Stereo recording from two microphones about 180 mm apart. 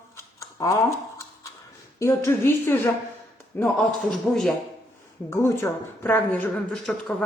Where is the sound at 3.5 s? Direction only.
Centre (ahead or behind).